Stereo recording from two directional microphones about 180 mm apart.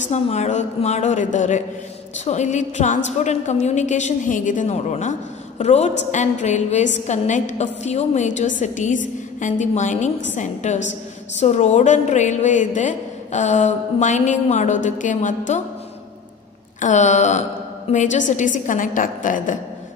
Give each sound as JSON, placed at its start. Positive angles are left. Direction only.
{"t": 0.1, "sound": "a woman's voice", "side_deg": 40}
{"t": 16.8, "sound": "a woman's voice", "side_deg": 40}